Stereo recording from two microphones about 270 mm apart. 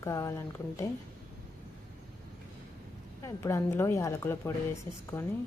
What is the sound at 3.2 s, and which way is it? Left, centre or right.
Speech, centre.